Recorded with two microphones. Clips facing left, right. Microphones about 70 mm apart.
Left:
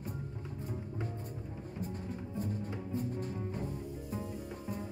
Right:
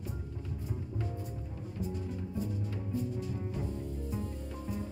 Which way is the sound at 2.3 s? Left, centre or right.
Left.